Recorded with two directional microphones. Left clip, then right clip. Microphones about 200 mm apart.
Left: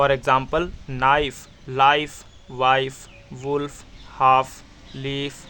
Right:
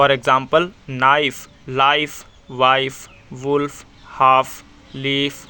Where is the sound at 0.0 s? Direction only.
20° right (ahead or behind).